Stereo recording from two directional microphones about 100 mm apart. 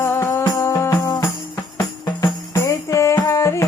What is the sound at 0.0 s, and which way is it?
Music, 25° left (ahead or behind).